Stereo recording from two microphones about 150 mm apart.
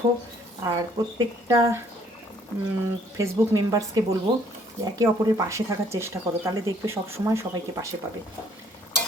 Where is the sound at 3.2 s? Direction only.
25° right (ahead or behind).